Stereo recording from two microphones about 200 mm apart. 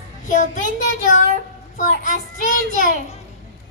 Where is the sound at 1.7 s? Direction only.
40° left (ahead or behind).